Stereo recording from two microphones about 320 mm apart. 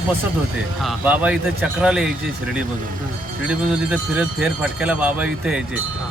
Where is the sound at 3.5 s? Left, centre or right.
Centre.